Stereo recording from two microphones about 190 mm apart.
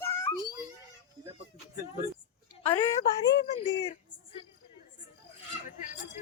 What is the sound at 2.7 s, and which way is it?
Speech, 10° left (ahead or behind).